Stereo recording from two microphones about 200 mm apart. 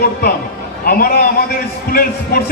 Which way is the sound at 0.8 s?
45° left (ahead or behind).